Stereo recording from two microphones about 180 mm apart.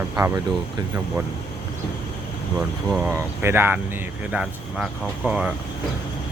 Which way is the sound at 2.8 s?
5° right (ahead or behind).